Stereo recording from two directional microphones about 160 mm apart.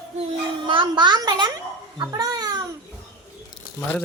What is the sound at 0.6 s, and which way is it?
A child's voice, 30° right (ahead or behind).